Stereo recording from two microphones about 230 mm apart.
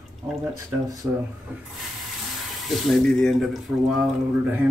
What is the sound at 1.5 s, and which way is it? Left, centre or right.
Speech, centre.